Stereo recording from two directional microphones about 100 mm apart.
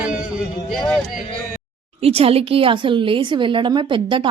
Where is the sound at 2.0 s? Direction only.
75° right (ahead or behind).